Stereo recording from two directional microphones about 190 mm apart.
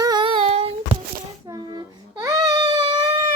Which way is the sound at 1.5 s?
20° right (ahead or behind).